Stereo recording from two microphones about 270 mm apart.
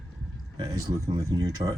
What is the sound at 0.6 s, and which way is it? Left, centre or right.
Speech, centre.